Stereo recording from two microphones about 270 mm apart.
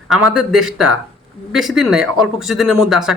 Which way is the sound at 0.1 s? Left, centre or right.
Centre.